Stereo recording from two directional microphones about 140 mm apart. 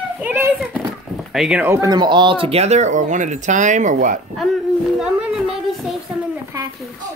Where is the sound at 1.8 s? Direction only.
30° right (ahead or behind); by 4.2 s 65° right (ahead or behind).